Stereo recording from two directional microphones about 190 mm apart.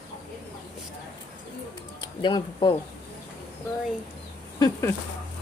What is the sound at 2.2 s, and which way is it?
Speech, 25° left (ahead or behind).